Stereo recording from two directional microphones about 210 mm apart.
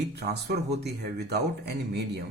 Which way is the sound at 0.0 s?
50° right (ahead or behind).